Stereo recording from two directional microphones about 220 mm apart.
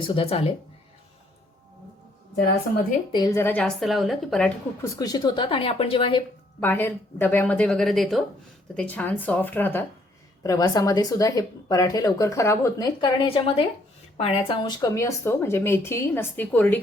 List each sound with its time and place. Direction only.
0.0 s a woman's voice: 25° left (ahead or behind)
3.1 s a woman's voice: 15° left (ahead or behind)
4.9 s a woman's voice: 15° left (ahead or behind)
6.6 s speech: 10° left (ahead or behind)